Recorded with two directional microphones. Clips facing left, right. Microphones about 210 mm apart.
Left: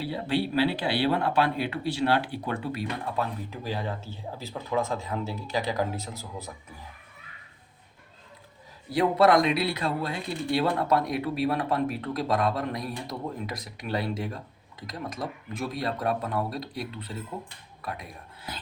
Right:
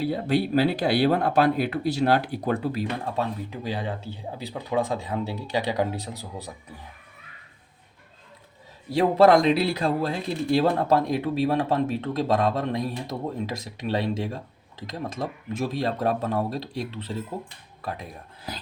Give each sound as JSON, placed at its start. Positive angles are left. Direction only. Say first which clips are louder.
{"t": 0.0, "sound": "speech", "louder": "right 4 dB", "side_deg": -45}
{"t": 3.2, "sound": "speech", "louder": "right 3 dB", "side_deg": -20}
{"t": 9.0, "sound": "a man's voice", "louder": "right 3 dB", "side_deg": -30}